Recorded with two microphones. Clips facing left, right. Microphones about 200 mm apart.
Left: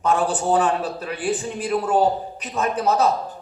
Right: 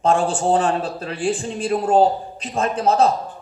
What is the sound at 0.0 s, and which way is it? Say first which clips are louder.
A man's voice: right 3 dB; 25° right (ahead or behind).